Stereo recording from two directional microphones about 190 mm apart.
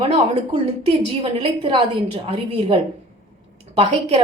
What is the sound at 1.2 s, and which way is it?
A woman's voice, 25° right (ahead or behind).